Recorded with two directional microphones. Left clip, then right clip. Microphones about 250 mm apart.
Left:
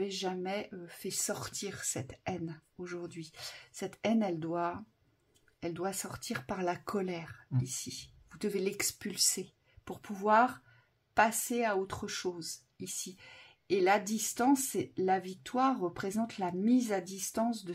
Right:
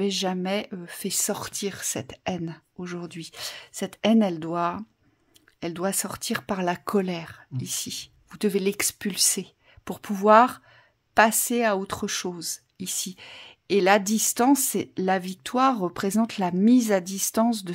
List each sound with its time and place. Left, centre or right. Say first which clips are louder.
0.0 s speech: right 9 dB; right